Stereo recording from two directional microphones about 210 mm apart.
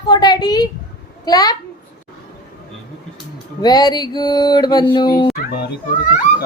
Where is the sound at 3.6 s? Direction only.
20° left (ahead or behind).